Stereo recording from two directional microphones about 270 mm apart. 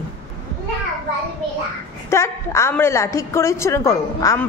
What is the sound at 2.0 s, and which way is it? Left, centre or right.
A woman's voice, centre.